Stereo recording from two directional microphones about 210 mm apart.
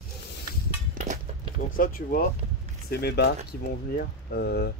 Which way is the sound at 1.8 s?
45° left (ahead or behind).